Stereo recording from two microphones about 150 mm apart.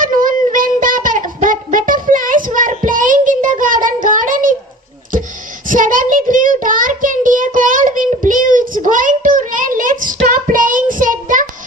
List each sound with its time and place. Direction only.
0.0 s music: 65° right (ahead or behind)
5.6 s child singing: 65° right (ahead or behind)